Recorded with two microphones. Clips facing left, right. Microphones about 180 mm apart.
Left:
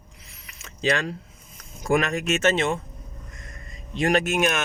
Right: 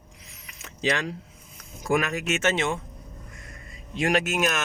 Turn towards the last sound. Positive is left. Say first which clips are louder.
# left 2 dB
turn(degrees=-5)  # may be behind; listen again after turning